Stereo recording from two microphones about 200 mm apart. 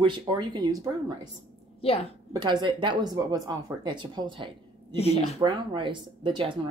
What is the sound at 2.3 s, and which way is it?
Speech, 20° right (ahead or behind).